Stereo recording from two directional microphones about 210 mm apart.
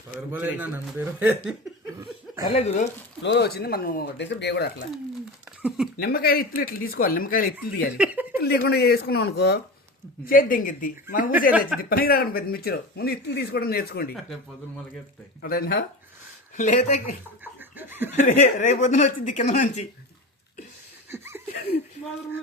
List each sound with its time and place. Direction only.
0.3 s a man's voice: 10° right (ahead or behind)
2.0 s cough: 15° right (ahead or behind)
2.5 s speech: 30° left (ahead or behind)
3.2 s a man's voice: 50° left (ahead or behind)
5.6 s speech: 5° right (ahead or behind)
6.0 s a man's voice: 45° left (ahead or behind)
7.9 s a sound: 5° right (ahead or behind)
8.4 s a man's voice: 50° left (ahead or behind)
15.4 s a man's voice: 45° left (ahead or behind)
16.6 s speech: 35° left (ahead or behind)
17.4 s chicken: 10° right (ahead or behind)
18.1 s speech: 35° left (ahead or behind)
21.1 s laughter: 10° right (ahead or behind)